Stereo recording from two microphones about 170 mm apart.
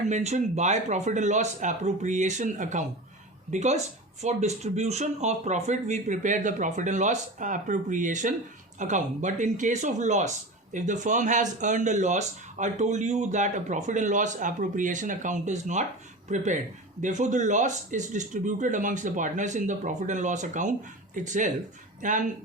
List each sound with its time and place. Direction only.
0.1 s speech: 45° right (ahead or behind)